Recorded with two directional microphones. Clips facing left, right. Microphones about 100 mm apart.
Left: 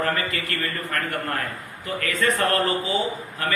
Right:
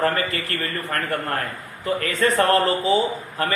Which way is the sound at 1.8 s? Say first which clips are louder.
Right 3 dB; 30° right (ahead or behind).